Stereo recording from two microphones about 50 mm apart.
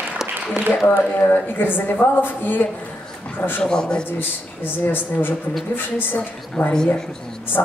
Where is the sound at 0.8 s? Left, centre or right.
Left.